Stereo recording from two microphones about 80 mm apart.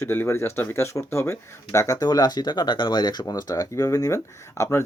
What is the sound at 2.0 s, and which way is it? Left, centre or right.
Speech, left.